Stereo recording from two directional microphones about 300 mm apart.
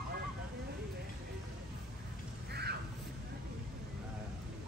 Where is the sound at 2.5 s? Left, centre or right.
Right.